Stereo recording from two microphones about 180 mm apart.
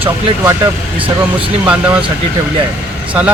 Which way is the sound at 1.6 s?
5° right (ahead or behind).